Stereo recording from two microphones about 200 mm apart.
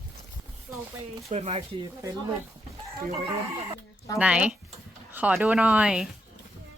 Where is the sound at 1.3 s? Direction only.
30° right (ahead or behind).